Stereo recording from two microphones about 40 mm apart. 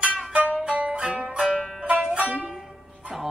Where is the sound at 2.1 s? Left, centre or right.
Right.